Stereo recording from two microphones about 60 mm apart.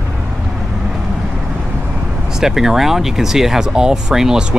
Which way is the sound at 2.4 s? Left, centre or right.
Centre.